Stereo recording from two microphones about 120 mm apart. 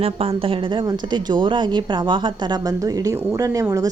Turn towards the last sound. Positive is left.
turn(degrees=-25)  # may be behind; listen again after turning